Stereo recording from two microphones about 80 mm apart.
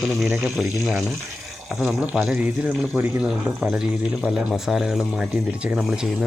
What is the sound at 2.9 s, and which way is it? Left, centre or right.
Speech, right.